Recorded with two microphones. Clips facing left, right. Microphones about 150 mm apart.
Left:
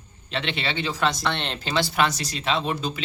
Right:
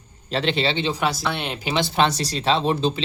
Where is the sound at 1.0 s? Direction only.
5° right (ahead or behind).